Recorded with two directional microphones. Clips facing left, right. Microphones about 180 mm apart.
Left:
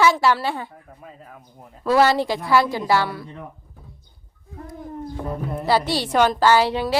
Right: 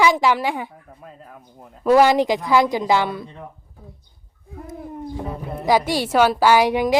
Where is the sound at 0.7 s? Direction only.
Centre (ahead or behind).